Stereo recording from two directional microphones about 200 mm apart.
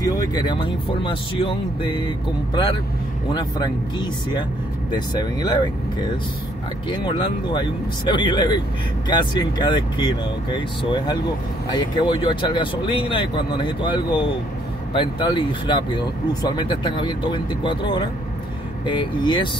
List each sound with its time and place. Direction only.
0.0 s speech: 20° left (ahead or behind)
3.3 s speech: 20° left (ahead or behind)
6.9 s speech: 25° left (ahead or behind)